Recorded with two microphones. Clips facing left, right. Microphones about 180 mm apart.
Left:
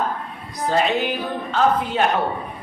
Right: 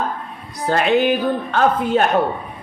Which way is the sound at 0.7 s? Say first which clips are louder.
Right 5 dB; 55° right (ahead or behind).